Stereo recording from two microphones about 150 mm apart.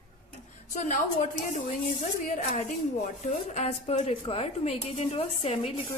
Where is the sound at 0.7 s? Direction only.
60° left (ahead or behind).